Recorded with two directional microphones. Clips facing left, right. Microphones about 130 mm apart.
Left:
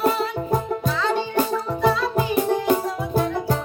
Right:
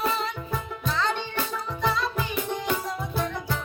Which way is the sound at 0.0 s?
40° left (ahead or behind).